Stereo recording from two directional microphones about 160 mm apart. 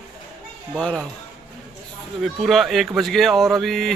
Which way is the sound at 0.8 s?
5° left (ahead or behind).